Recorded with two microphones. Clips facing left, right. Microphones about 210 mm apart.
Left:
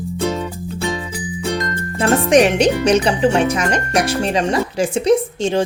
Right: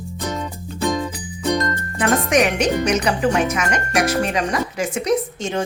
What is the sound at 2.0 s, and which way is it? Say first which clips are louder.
A woman's voice: left 5 dB; 30° left (ahead or behind).